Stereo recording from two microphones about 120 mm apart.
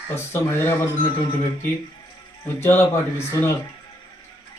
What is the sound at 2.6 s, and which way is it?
Speech, 20° left (ahead or behind).